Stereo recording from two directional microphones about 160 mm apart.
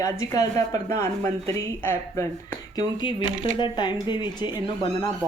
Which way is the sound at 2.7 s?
30° left (ahead or behind).